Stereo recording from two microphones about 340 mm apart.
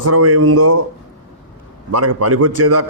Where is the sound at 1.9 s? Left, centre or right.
Right.